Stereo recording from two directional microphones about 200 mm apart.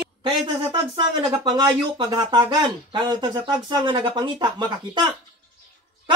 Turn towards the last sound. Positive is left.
turn(degrees=-25)  # may be behind; listen again after turning